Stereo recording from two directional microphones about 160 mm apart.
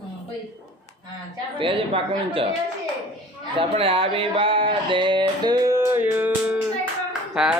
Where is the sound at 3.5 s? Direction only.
35° right (ahead or behind); by 6.5 s 10° right (ahead or behind).